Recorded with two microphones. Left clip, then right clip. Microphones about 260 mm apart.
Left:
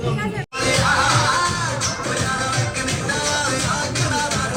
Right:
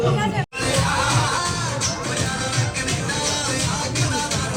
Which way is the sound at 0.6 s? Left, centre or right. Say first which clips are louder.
Left 4 dB; centre.